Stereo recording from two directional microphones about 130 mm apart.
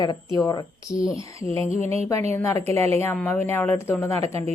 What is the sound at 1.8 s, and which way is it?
Speech, 55° right (ahead or behind).